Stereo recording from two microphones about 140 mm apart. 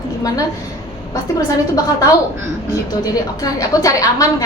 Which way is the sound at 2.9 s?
25° left (ahead or behind).